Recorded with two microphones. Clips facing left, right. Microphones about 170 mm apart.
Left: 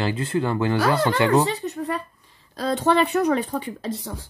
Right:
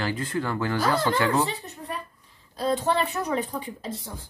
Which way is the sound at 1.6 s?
75° left (ahead or behind).